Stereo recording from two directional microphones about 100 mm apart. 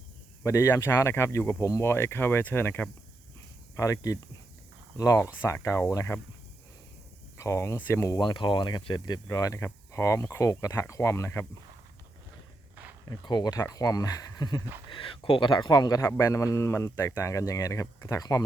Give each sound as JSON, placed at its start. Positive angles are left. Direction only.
{"t": 0.4, "sound": "speech", "side_deg": 30}
{"t": 3.8, "sound": "a man's voice", "side_deg": 30}
{"t": 7.3, "sound": "speech", "side_deg": 30}
{"t": 7.8, "sound": "speech", "side_deg": 20}
{"t": 8.2, "sound": "speech", "side_deg": 50}
{"t": 9.3, "sound": "a man's voice", "side_deg": 35}
{"t": 13.1, "sound": "a man's voice", "side_deg": 45}
{"t": 14.8, "sound": "speech", "side_deg": 55}
{"t": 16.0, "sound": "a man's voice", "side_deg": 30}